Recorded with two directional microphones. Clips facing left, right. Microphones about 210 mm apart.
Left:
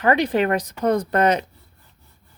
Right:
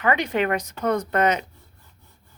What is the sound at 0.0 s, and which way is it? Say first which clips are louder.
Speech: left 4 dB; 35° left (ahead or behind).